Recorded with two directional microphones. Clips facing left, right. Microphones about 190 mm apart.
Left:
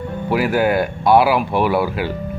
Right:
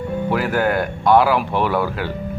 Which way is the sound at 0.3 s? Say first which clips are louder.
Left 3 dB; 10° left (ahead or behind).